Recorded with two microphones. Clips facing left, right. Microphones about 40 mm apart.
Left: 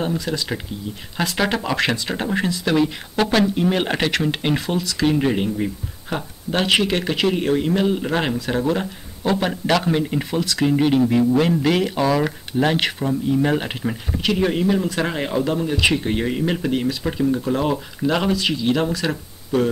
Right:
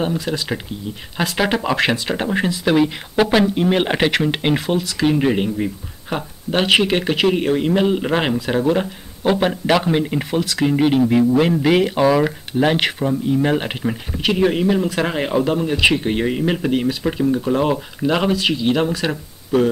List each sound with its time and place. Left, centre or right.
0.1 s speech: centre
10.4 s speech: centre